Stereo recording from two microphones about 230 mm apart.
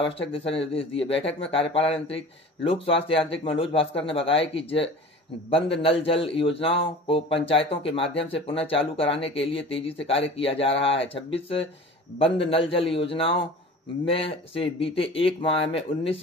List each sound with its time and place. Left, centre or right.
0.3 s speech: left